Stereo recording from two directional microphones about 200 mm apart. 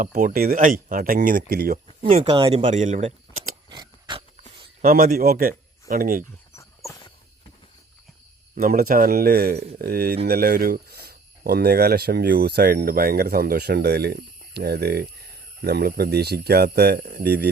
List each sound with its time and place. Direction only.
0.0 s speech: 40° right (ahead or behind)
2.0 s speech: 30° right (ahead or behind)
2.6 s speech: 35° right (ahead or behind)
3.7 s dog: 20° right (ahead or behind)
4.8 s speech: 45° right (ahead or behind)
6.6 s a sound: 15° left (ahead or behind)
8.5 s speech: 45° right (ahead or behind)